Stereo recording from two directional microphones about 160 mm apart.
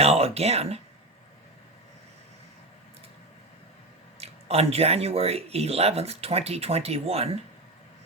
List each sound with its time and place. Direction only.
0.0 s speech: 40° right (ahead or behind)
4.2 s speech: 40° right (ahead or behind)